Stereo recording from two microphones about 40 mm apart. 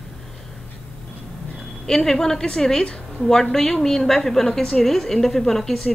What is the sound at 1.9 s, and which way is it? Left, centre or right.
A woman's voice, centre.